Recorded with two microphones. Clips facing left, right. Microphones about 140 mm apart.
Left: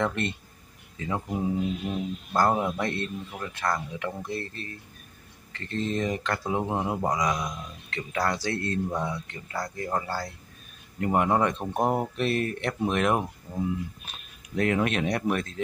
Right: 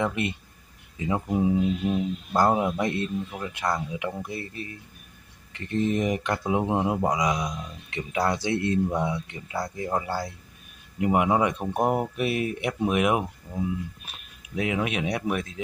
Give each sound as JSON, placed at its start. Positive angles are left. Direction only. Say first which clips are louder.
{"t": 0.0, "sound": "speech", "louder": "right 1 dB", "side_deg": -5}